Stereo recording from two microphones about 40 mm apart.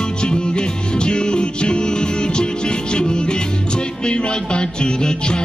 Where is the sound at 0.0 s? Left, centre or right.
Left.